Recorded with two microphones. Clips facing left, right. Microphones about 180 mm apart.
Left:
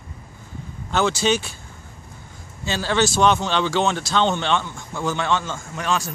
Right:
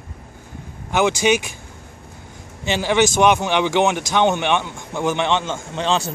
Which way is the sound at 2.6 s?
15° right (ahead or behind).